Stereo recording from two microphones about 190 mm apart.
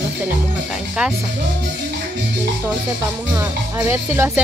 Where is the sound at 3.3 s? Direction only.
15° right (ahead or behind).